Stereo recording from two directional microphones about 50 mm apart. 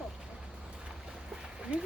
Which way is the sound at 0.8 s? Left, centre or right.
Centre.